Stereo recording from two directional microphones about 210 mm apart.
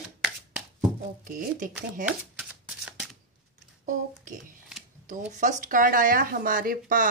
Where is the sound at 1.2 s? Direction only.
40° right (ahead or behind).